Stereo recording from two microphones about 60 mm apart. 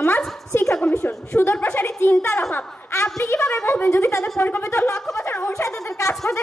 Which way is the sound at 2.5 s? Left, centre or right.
Left.